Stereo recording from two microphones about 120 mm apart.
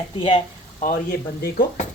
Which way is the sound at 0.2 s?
45° left (ahead or behind).